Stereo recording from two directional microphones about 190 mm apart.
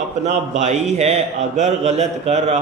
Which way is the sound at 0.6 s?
35° right (ahead or behind).